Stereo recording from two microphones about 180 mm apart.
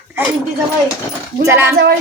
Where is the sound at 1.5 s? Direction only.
10° right (ahead or behind).